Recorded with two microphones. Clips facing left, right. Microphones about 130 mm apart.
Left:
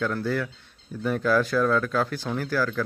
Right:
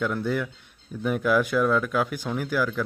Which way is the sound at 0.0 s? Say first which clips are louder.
Even; 15° right (ahead or behind).